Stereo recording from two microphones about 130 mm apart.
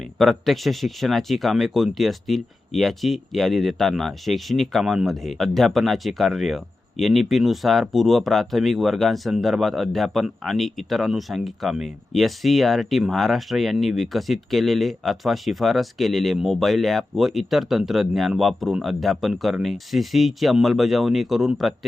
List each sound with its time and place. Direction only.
0.2 s speech: centre (ahead or behind)